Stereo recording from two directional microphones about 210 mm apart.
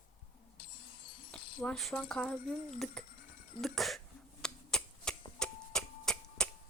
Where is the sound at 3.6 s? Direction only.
Centre (ahead or behind).